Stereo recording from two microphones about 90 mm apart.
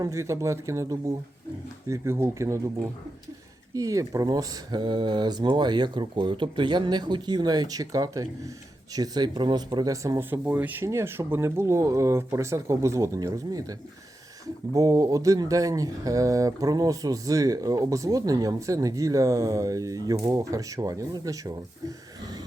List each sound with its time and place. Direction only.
0.0 s speech: 35° right (ahead or behind)
10.2 s speech: 25° right (ahead or behind); by 22.4 s 45° right (ahead or behind)